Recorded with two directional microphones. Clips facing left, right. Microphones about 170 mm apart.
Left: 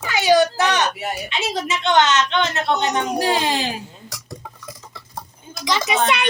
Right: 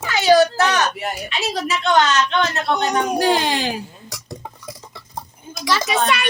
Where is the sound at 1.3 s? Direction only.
20° left (ahead or behind).